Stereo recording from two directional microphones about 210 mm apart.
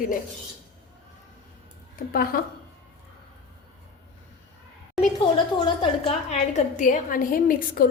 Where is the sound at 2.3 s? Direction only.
45° left (ahead or behind).